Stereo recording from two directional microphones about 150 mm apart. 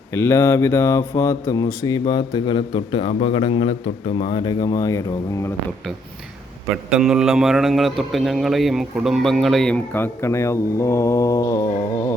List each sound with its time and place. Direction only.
0.1 s speech: 20° left (ahead or behind)
6.9 s a man's voice: 5° right (ahead or behind); by 12.1 s 25° left (ahead or behind)